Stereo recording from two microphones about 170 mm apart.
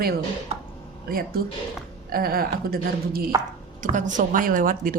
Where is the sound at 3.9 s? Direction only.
50° right (ahead or behind).